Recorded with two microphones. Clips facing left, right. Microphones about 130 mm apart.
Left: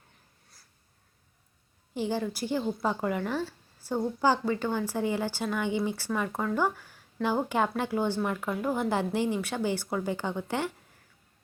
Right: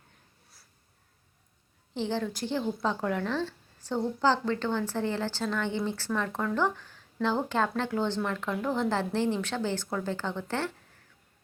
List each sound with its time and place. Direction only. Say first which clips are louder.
1.9 s a woman's voice: left 1 dB; 10° left (ahead or behind)